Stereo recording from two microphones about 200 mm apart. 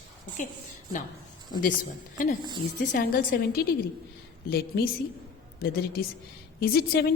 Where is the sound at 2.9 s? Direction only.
45° left (ahead or behind).